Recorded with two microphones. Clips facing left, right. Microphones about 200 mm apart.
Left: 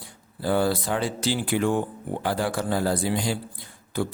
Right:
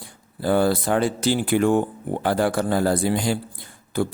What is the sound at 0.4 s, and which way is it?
A man's voice, 55° right (ahead or behind).